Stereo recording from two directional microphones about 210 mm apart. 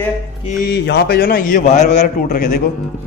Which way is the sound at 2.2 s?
45° left (ahead or behind).